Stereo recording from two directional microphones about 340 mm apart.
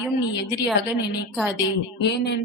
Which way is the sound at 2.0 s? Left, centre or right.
Left.